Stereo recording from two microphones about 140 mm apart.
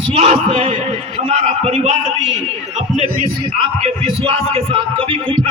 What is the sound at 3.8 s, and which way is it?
Speech, 45° right (ahead or behind).